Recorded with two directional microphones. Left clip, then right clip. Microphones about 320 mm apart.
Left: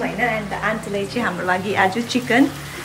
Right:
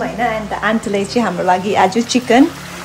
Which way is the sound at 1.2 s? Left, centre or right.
Centre.